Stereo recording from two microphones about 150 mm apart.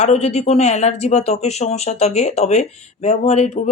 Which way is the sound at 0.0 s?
45° left (ahead or behind).